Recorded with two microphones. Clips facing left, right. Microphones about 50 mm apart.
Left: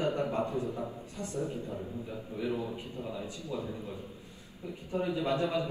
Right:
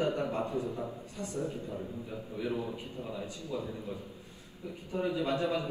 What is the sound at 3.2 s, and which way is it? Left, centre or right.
Speech, left.